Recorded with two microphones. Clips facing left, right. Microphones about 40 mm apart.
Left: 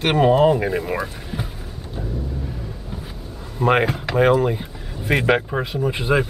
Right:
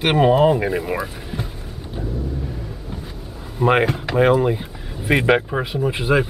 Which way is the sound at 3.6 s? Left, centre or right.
Centre.